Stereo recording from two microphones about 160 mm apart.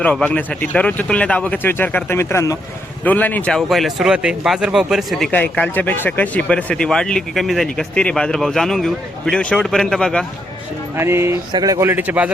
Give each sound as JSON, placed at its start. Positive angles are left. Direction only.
{"t": 0.0, "sound": "speech", "side_deg": 10}
{"t": 10.9, "sound": "a man's voice", "side_deg": -15}